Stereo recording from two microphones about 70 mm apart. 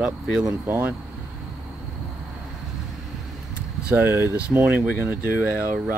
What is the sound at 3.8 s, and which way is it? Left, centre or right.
Speech, centre.